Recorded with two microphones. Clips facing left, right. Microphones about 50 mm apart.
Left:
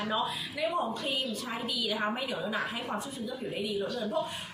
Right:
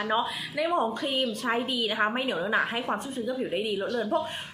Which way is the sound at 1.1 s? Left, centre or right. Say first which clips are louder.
Right 6 dB; right.